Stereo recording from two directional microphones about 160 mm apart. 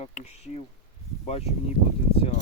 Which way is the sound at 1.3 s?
40° left (ahead or behind).